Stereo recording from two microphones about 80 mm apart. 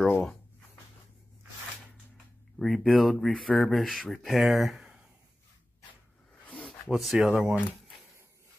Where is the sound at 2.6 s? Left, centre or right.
Centre.